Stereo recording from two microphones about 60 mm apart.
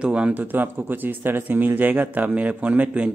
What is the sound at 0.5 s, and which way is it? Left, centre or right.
Speech, right.